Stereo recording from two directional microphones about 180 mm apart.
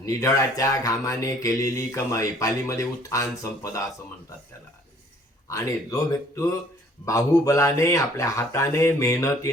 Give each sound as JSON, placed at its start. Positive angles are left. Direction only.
{"t": 0.0, "sound": "speech", "side_deg": 15}
{"t": 5.5, "sound": "speech", "side_deg": 15}